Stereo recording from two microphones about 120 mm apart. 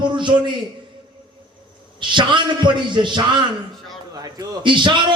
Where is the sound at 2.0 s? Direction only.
40° right (ahead or behind).